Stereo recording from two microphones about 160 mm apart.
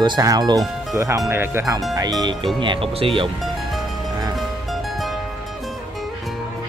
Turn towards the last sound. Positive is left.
turn(degrees=0)  # may be behind; listen again after turning